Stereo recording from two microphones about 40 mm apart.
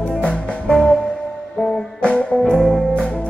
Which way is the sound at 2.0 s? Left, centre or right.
Left.